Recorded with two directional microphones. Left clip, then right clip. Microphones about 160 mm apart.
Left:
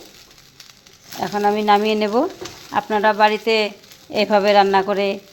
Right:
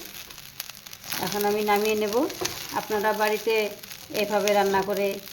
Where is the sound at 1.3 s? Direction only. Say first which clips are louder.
Left 8 dB; 45° left (ahead or behind).